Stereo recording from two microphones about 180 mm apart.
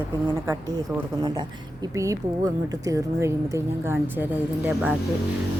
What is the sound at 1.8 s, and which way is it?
A woman's voice, 15° right (ahead or behind).